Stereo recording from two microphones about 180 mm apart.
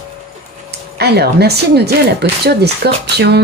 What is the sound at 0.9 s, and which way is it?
Speech, 65° right (ahead or behind).